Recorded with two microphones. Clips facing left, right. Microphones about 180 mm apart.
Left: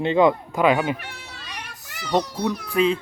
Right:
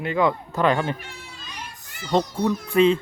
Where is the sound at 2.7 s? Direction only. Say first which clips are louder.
Right 3 dB; centre (ahead or behind).